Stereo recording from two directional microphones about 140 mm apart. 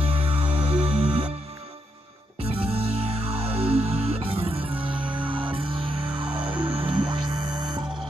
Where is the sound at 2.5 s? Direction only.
45° right (ahead or behind).